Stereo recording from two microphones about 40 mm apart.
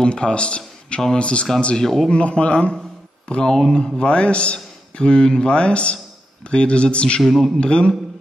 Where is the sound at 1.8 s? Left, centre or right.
Centre.